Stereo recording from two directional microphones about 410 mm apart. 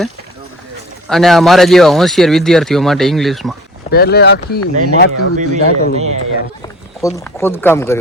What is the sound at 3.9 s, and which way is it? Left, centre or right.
Speech, left.